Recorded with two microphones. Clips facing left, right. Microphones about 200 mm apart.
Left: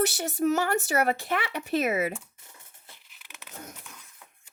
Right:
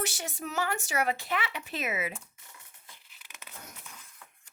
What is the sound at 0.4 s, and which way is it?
Speech, 50° left (ahead or behind).